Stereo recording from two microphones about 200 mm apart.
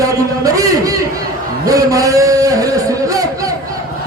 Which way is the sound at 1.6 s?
15° right (ahead or behind).